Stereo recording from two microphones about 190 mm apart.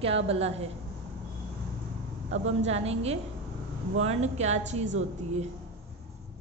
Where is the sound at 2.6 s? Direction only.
35° right (ahead or behind).